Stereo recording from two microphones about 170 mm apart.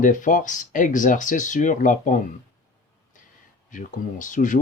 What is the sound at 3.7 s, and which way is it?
Speech, 50° left (ahead or behind).